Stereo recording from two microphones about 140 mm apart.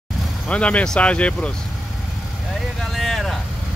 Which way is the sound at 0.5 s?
10° left (ahead or behind).